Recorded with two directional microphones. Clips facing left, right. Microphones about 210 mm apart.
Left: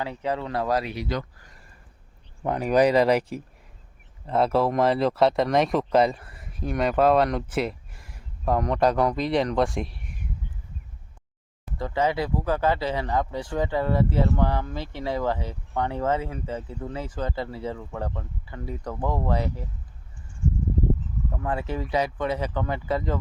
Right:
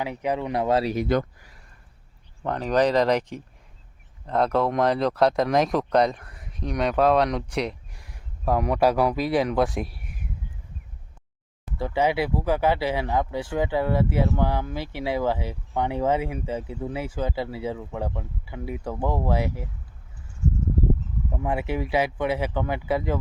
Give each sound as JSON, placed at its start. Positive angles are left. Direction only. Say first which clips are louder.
{"t": 0.0, "sound": "speech", "louder": "right 2 dB", "side_deg": -15}
{"t": 0.9, "sound": "speech", "louder": "right 7 dB", "side_deg": -50}
{"t": 2.4, "sound": "speech", "louder": "left 2 dB", "side_deg": 10}
{"t": 11.6, "sound": "speech", "louder": "right 1 dB", "side_deg": -10}
{"t": 21.2, "sound": "speech", "louder": "right 2 dB", "side_deg": -15}